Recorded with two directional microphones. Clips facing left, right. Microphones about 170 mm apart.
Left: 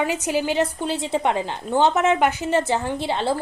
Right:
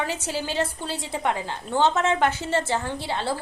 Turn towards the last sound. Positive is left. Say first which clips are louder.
# left 5 dB
turn(degrees=20)  # may be behind; listen again after turning